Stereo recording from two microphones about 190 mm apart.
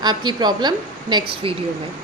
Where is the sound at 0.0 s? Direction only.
20° right (ahead or behind).